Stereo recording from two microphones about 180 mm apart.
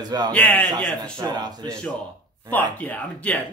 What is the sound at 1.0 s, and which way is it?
Speech, 20° right (ahead or behind).